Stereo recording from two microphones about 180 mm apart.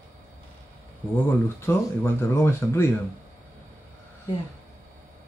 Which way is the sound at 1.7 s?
15° left (ahead or behind).